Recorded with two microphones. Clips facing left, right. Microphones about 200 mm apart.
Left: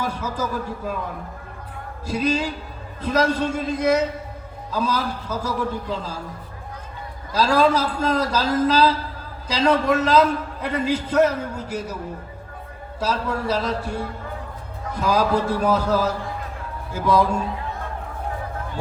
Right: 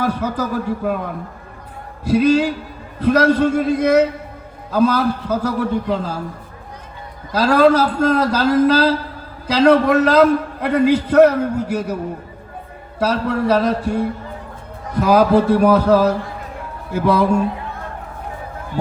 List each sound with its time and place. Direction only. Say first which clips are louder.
0.0 s a man's voice: right 6 dB; 60° right (ahead or behind)
2.0 s a man's voice: right 9 dB; 60° right (ahead or behind)
7.3 s a man's voice: right 5 dB; 60° right (ahead or behind)
13.0 s a man's voice: right 6 dB; 65° right (ahead or behind)